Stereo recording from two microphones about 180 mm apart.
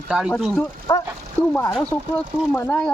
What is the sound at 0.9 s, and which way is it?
Speech, 15° left (ahead or behind).